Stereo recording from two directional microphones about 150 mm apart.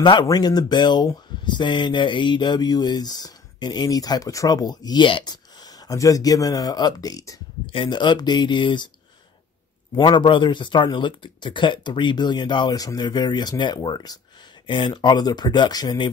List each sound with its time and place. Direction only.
0.0 s speech: 30° left (ahead or behind)
9.9 s speech: 30° left (ahead or behind)